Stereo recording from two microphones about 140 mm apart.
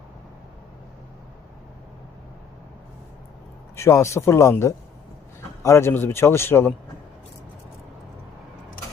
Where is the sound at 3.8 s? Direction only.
20° left (ahead or behind).